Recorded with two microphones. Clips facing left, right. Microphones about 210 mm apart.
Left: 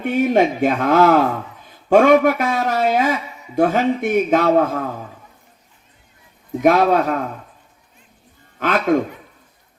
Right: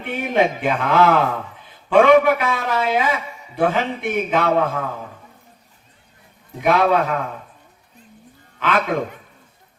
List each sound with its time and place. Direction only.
0.0 s a man's voice: 45° left (ahead or behind)
1.6 s a sound: 45° left (ahead or behind)
2.4 s a man's voice: 45° left (ahead or behind)
6.6 s a man's voice: 45° left (ahead or behind)
8.5 s a man's voice: 45° left (ahead or behind)